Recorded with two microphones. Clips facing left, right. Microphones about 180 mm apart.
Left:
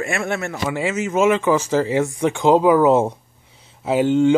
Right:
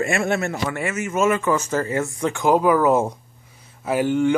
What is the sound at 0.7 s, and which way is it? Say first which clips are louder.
Speech: left 4 dB; 15° left (ahead or behind).